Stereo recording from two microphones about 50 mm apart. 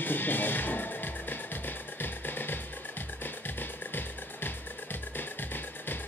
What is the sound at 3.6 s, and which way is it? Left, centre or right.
Music, left.